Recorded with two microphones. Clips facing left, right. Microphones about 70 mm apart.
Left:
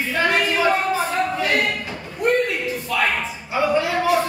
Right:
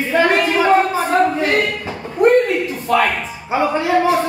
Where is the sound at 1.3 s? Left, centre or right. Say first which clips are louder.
Right 3 dB; right.